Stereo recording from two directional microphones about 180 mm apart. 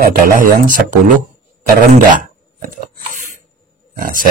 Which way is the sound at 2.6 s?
45° right (ahead or behind).